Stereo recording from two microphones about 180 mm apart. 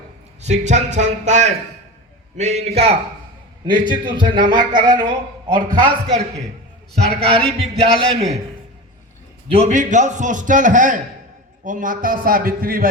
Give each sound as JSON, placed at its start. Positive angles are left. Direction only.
{"t": 0.4, "sound": "a man's voice", "side_deg": -40}
{"t": 6.9, "sound": "speech", "side_deg": -35}
{"t": 9.5, "sound": "a man's voice", "side_deg": -40}